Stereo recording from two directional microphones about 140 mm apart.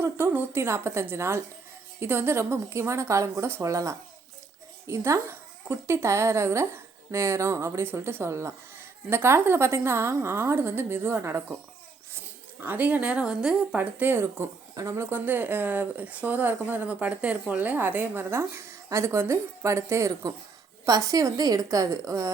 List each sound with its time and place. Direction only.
0.0 s speech: 15° right (ahead or behind)
12.6 s speech: 10° right (ahead or behind)